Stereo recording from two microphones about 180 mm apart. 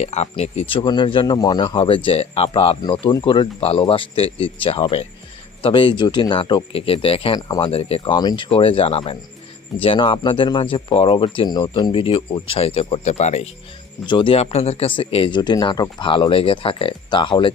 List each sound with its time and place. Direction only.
0.0 s speech: 35° left (ahead or behind); by 7.7 s 20° left (ahead or behind)
7.7 s speech: 35° left (ahead or behind)
14.1 s speech: 30° left (ahead or behind)